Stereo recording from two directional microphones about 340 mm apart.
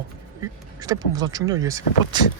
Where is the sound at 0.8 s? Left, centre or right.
Centre.